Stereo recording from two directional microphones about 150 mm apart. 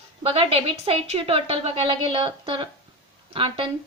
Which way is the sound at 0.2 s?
40° right (ahead or behind).